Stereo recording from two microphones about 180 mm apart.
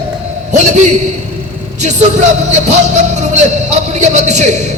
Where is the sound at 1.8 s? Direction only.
40° right (ahead or behind).